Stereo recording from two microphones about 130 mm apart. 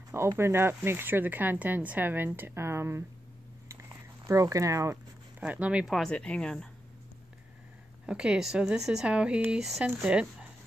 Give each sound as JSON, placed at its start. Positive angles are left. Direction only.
{"t": 0.4, "sound": "speech", "side_deg": -20}
{"t": 4.3, "sound": "speech", "side_deg": -25}
{"t": 5.4, "sound": "speech", "side_deg": -10}
{"t": 8.1, "sound": "speech", "side_deg": -5}